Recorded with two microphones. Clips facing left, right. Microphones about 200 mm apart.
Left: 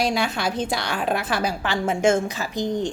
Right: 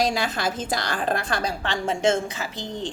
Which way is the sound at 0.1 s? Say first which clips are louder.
Left 2 dB; centre (ahead or behind).